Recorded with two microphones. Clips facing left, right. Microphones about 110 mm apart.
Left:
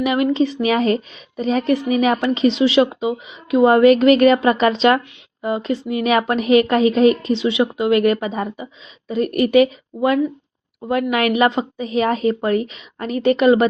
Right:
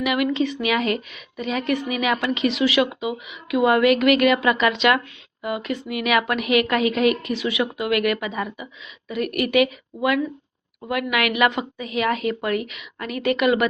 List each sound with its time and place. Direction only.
0.0 s a woman's voice: 35° left (ahead or behind)